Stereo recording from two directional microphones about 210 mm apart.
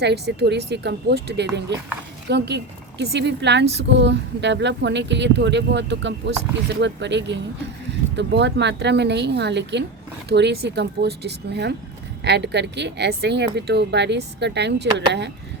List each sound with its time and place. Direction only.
0.0 s speech: 50° right (ahead or behind)